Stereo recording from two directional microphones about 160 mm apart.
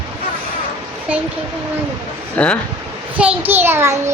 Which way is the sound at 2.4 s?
10° left (ahead or behind).